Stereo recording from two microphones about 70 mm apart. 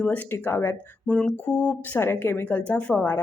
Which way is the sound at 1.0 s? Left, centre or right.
Centre.